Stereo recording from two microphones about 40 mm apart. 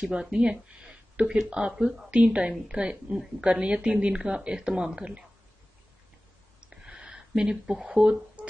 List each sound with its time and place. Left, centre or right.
0.0 s speech: centre
6.6 s a sound: right
7.9 s speech: right